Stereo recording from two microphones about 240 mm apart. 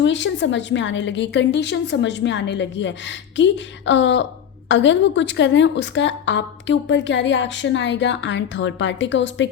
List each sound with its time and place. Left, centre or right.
0.0 s a woman's voice: left